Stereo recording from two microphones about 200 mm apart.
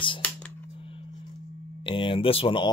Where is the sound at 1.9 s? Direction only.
25° left (ahead or behind).